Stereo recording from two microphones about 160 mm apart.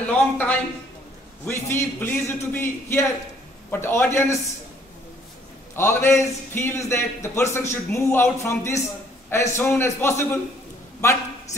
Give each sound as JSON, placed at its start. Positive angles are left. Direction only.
{"t": 0.1, "sound": "a sound", "side_deg": 10}
{"t": 1.4, "sound": "a man's voice", "side_deg": 15}
{"t": 5.8, "sound": "a man's voice", "side_deg": 15}